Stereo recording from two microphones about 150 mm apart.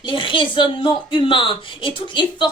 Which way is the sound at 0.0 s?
35° left (ahead or behind).